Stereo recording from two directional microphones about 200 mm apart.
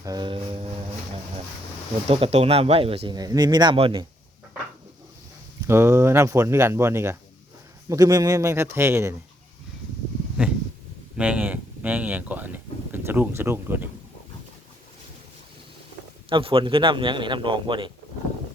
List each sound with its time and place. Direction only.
0.0 s speech: 20° right (ahead or behind)
2.0 s speech: 30° right (ahead or behind)
5.6 s speech: 10° right (ahead or behind)
10.4 s a sound: 5° right (ahead or behind)
11.2 s speech: 5° right (ahead or behind)
16.3 s speech: 25° right (ahead or behind)